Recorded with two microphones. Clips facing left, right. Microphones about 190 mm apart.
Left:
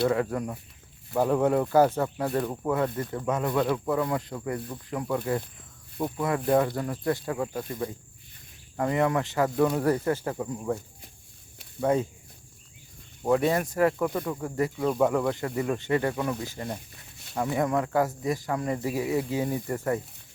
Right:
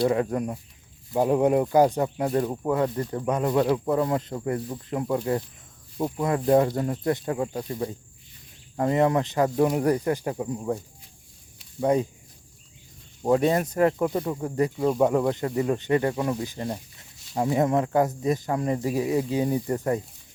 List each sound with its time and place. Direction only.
0.1 s speech: 20° right (ahead or behind)
8.7 s speech: 25° right (ahead or behind)
11.8 s speech: 20° right (ahead or behind)
13.2 s speech: 20° right (ahead or behind)